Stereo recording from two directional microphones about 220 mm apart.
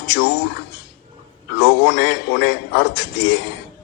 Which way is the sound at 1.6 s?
50° left (ahead or behind).